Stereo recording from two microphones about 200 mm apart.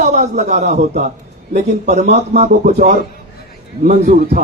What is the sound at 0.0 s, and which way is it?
A man's voice, 35° right (ahead or behind).